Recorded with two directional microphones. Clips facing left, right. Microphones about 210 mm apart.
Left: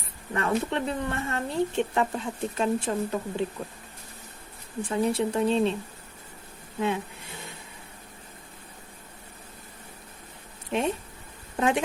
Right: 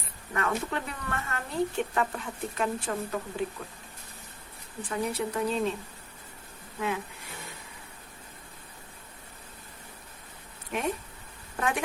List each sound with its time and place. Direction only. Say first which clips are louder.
0.3 s speech: left 4 dB; 25° left (ahead or behind)
4.8 s speech: left 5 dB; 25° left (ahead or behind)
6.7 s a sound: left 4 dB; 25° left (ahead or behind)
10.7 s speech: left 4 dB; 25° left (ahead or behind)